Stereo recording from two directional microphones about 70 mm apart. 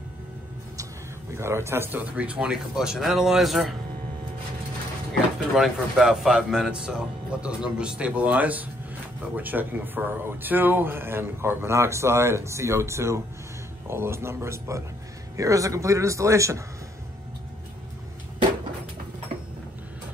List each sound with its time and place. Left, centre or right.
1.3 s a man's voice: right; by 3.7 s centre
5.5 s a man's voice: centre; by 14.8 s right
15.3 s a man's voice: right